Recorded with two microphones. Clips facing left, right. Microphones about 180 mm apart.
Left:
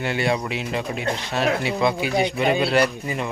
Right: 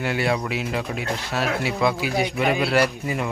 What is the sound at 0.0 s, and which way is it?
A man's voice, 5° right (ahead or behind).